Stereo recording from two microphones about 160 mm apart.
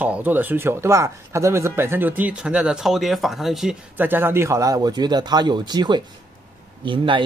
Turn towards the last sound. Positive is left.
turn(degrees=-30)  # may be behind; listen again after turning